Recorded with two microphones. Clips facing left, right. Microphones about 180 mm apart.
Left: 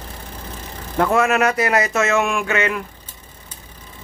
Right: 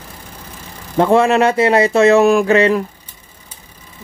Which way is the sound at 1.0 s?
30° right (ahead or behind).